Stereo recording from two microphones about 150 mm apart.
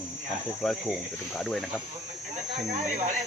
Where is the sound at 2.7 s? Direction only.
50° right (ahead or behind).